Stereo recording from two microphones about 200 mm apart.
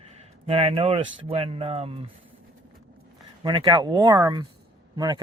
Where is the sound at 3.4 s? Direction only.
25° right (ahead or behind).